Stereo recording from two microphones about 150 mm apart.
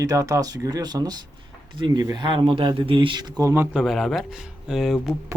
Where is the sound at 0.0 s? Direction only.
20° right (ahead or behind).